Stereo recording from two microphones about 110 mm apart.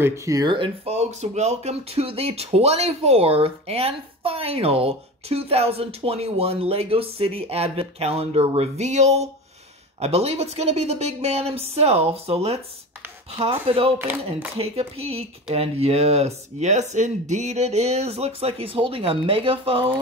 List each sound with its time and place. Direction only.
0.0 s speech: 25° right (ahead or behind)
0.8 s speech: 85° right
9.9 s speech: 70° right (ahead or behind)
13.9 s speech: 15° right (ahead or behind)
14.6 s speech: 65° right (ahead or behind)